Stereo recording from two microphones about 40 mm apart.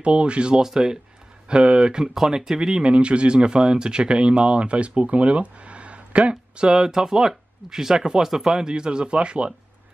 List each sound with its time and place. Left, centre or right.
0.0 s speech: right
0.6 s speech: centre
1.5 s speech: right
2.9 s speech: right
6.8 s speech: centre; by 9.5 s right